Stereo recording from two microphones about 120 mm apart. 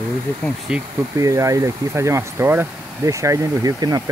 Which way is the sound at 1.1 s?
25° right (ahead or behind).